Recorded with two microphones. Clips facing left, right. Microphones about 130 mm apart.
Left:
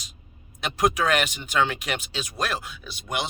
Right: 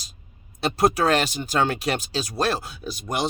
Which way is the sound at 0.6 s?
35° right (ahead or behind).